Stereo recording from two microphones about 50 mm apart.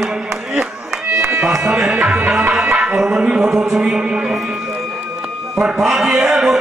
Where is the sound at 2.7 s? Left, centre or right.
Centre.